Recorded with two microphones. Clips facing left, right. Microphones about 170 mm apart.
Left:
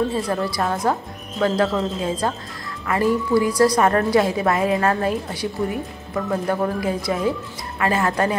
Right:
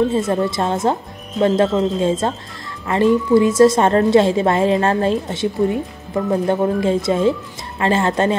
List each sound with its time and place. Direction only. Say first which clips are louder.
0.1 s a woman's voice: right 5 dB; 25° right (ahead or behind)